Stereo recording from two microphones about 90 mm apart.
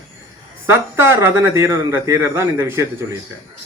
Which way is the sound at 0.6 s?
30° right (ahead or behind).